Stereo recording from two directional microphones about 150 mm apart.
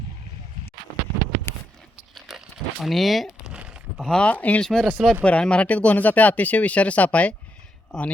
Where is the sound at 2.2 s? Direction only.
Centre (ahead or behind).